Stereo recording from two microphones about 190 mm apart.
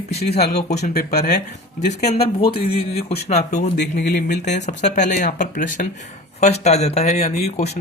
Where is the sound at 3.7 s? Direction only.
60° left (ahead or behind).